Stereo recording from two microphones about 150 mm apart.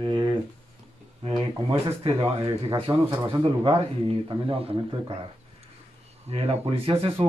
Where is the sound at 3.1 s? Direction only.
25° right (ahead or behind).